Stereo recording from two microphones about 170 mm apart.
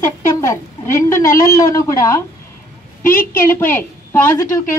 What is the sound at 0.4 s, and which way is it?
A woman's voice, 15° left (ahead or behind).